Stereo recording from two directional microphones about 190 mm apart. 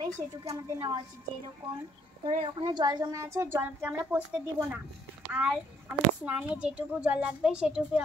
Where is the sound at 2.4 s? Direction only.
25° right (ahead or behind).